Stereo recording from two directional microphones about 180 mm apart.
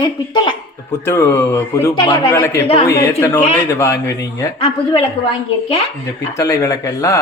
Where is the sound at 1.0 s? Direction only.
15° left (ahead or behind).